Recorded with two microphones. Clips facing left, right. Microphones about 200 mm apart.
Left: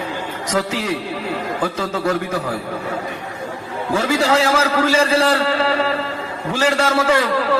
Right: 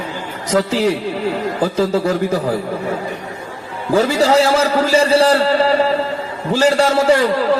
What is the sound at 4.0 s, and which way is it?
A man's voice, 35° right (ahead or behind).